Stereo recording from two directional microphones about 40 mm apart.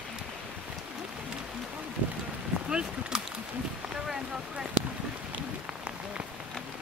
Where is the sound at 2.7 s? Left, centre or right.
Right.